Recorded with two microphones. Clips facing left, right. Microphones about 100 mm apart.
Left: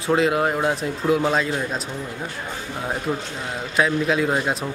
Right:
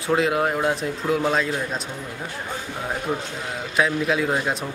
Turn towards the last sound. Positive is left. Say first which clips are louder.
# left 1 dB
turn(degrees=0)  # may be behind; listen again after turning